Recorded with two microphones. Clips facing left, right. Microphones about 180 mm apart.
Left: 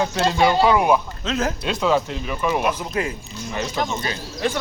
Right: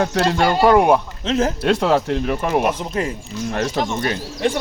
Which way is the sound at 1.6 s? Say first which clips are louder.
Right 3 dB; 75° right (ahead or behind).